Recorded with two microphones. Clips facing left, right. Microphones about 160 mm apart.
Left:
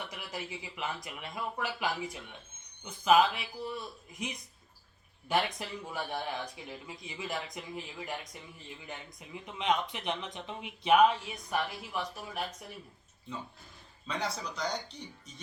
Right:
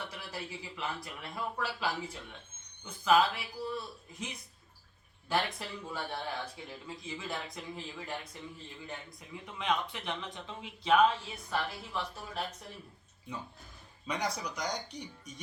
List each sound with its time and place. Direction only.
0.1 s a man's voice: 15° left (ahead or behind)
5.3 s speech: 15° left (ahead or behind)
14.1 s speech: 15° right (ahead or behind)